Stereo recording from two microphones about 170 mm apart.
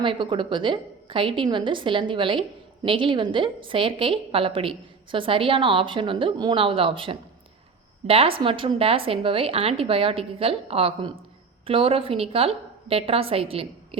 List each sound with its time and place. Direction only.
0.0 s a woman's voice: 30° right (ahead or behind)